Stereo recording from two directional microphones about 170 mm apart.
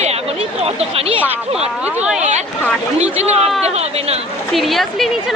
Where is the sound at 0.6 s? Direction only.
35° right (ahead or behind).